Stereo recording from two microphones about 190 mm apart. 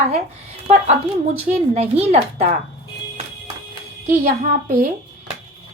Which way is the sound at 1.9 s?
35° right (ahead or behind).